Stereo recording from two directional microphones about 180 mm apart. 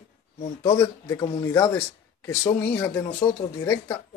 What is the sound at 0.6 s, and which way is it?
Speech, 25° left (ahead or behind).